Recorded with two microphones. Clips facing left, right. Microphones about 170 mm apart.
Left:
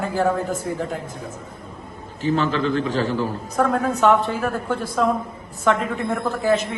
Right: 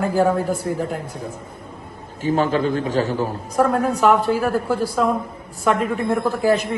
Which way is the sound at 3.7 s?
5° right (ahead or behind).